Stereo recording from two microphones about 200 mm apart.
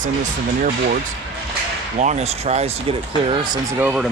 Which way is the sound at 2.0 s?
35° right (ahead or behind).